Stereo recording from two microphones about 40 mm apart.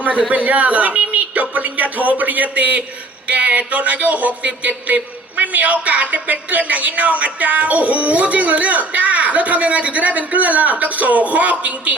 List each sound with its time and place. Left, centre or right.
0.3 s a woman's voice: right